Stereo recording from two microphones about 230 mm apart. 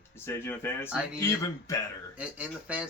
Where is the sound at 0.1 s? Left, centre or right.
Centre.